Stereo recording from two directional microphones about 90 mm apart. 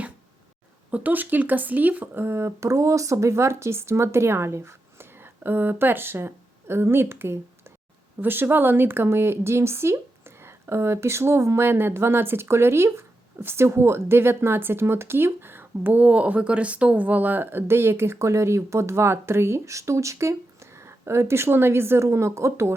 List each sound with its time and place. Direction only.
0.9 s speech: 15° right (ahead or behind)